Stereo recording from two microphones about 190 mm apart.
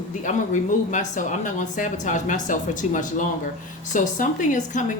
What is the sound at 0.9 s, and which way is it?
Speech, 40° left (ahead or behind).